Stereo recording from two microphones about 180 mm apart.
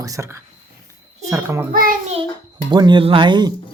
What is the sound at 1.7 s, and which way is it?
Speech, 50° right (ahead or behind).